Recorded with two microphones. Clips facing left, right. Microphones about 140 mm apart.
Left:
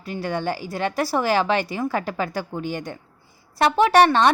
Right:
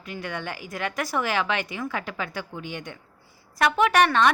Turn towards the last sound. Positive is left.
turn(degrees=30)  # may be behind; listen again after turning